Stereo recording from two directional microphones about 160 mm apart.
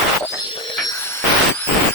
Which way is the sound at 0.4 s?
30° left (ahead or behind).